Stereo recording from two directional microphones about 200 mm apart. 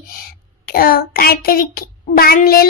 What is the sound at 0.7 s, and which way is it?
Speech, 45° left (ahead or behind).